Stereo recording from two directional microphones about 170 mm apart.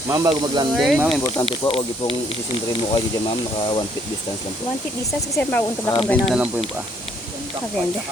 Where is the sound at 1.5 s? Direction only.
35° left (ahead or behind).